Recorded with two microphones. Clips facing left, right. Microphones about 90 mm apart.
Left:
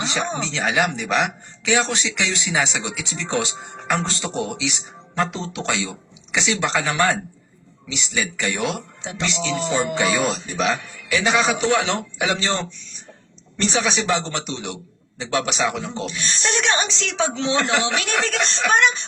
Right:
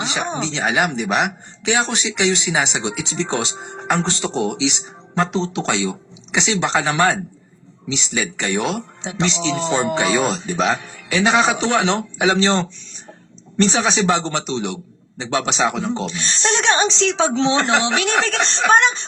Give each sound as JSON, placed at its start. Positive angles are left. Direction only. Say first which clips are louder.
{"t": 0.0, "sound": "speech", "louder": "right 1 dB", "side_deg": -20}